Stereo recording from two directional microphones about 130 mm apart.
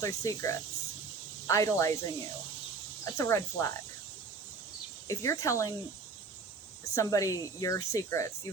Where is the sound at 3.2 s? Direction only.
25° left (ahead or behind).